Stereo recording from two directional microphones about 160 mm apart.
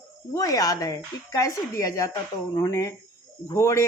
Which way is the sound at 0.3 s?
25° left (ahead or behind).